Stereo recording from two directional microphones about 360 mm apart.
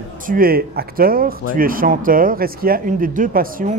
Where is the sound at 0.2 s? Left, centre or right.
Right.